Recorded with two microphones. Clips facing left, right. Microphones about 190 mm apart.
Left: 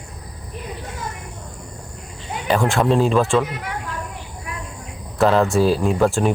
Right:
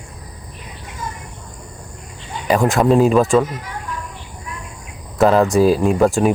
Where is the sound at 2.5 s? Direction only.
Centre (ahead or behind).